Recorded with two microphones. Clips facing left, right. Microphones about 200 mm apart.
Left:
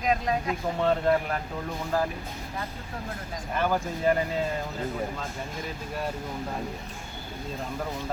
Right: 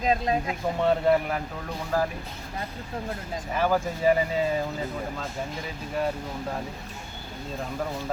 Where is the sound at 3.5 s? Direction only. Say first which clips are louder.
Right 2 dB; 5° right (ahead or behind).